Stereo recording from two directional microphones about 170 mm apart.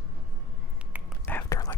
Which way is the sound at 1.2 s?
10° left (ahead or behind).